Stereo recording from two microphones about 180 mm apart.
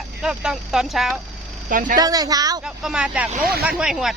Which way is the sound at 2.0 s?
20° right (ahead or behind).